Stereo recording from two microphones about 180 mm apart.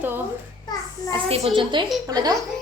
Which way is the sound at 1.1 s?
30° right (ahead or behind).